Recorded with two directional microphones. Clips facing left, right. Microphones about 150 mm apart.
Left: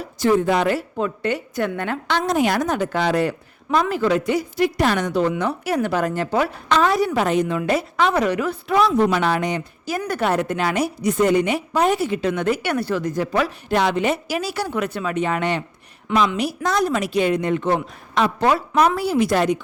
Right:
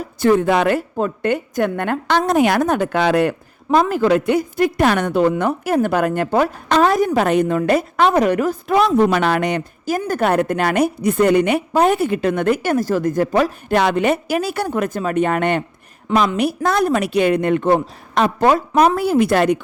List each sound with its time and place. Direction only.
0.0 s a woman's voice: 55° right (ahead or behind)
0.8 s a woman's voice: 45° right (ahead or behind); by 3.3 s 60° right (ahead or behind)
3.7 s a woman's voice: 40° right (ahead or behind)
8.8 s a woman's voice: 60° right (ahead or behind)
10.1 s a woman's voice: 50° right (ahead or behind)
16.0 s a woman's voice: 45° right (ahead or behind); by 19.6 s 60° right (ahead or behind)